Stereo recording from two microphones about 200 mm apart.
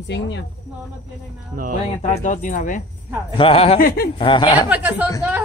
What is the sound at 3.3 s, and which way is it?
Speech, 25° left (ahead or behind).